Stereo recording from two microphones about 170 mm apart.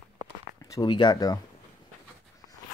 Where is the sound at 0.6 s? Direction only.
25° left (ahead or behind).